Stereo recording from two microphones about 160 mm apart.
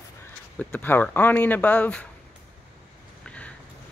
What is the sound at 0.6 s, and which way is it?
Speech, 10° left (ahead or behind).